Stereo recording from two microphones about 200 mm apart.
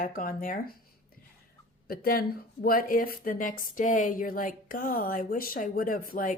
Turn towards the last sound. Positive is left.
turn(degrees=45)  # may be behind; listen again after turning